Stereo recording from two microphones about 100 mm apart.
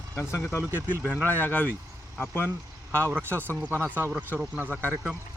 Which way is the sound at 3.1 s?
20° right (ahead or behind).